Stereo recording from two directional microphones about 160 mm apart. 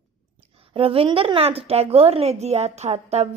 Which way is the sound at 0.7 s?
35° right (ahead or behind).